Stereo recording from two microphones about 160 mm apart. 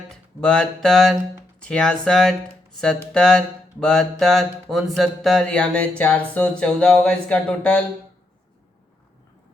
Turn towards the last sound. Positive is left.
turn(degrees=5)  # may be behind; listen again after turning